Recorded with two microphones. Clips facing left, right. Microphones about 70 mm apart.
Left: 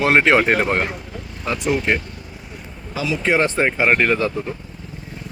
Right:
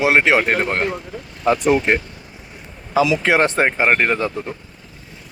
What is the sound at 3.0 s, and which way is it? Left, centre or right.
Speech, right.